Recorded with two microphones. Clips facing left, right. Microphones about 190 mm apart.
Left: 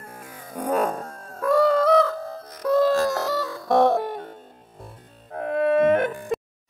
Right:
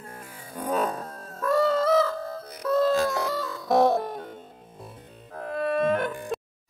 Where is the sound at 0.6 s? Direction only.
10° left (ahead or behind).